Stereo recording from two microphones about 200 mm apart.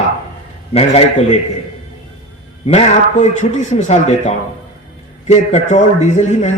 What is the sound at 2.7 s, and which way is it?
A man's voice, 35° left (ahead or behind).